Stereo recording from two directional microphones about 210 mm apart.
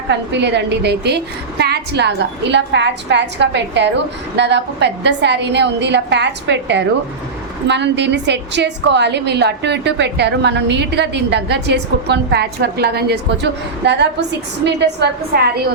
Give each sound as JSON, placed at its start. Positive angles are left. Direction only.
{"t": 0.1, "sound": "a woman's voice", "side_deg": -55}